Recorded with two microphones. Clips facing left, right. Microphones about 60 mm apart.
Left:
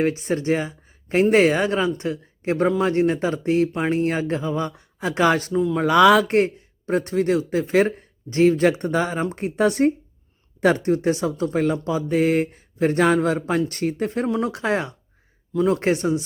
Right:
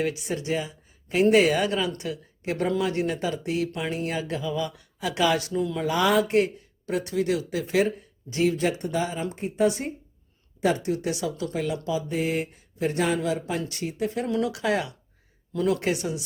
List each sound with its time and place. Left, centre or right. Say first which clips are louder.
0.0 s speech: left 6 dB; left
5.7 s speech: left 8 dB; left
6.3 s speech: left 3 dB; left
10.9 s speech: left 7 dB; left
15.8 s speech: left 7 dB; left